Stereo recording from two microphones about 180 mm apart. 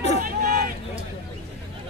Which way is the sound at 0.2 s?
50° right (ahead or behind).